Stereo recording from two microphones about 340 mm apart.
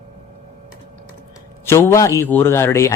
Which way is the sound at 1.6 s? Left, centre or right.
Centre.